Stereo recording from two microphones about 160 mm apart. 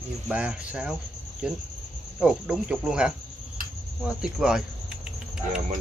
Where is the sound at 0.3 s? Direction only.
5° right (ahead or behind).